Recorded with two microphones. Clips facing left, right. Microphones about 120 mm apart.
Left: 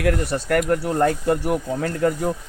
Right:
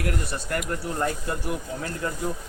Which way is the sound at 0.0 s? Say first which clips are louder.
Left 8 dB; 85° left.